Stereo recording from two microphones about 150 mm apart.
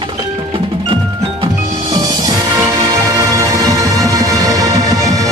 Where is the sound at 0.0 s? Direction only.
35° right (ahead or behind).